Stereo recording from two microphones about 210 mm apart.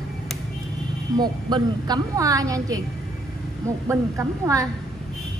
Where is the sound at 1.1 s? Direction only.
20° right (ahead or behind).